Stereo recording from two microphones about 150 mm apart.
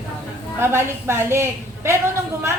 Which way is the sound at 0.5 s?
15° right (ahead or behind).